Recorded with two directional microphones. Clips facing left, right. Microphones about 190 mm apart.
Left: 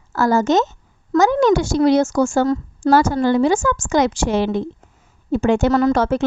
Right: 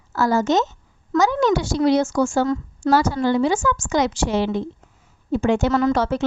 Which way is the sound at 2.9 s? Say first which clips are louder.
Left 3 dB; 50° left (ahead or behind).